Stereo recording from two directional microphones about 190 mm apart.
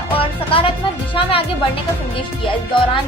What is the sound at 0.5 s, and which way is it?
Music, 30° left (ahead or behind).